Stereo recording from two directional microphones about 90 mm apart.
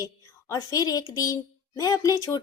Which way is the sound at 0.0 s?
35° left (ahead or behind).